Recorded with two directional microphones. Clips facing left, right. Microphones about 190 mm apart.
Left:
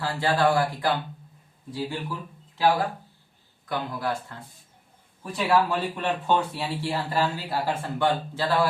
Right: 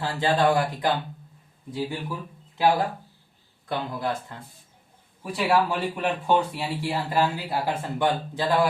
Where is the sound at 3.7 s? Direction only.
20° right (ahead or behind).